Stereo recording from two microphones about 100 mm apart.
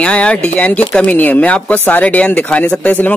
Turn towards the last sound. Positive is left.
turn(degrees=15)  # may be behind; listen again after turning